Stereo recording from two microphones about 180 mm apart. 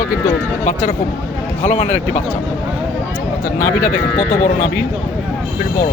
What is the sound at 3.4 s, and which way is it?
Speech, 50° left (ahead or behind).